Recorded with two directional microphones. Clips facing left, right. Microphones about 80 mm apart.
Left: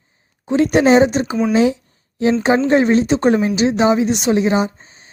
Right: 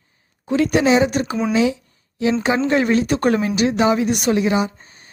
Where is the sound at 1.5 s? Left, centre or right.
Left.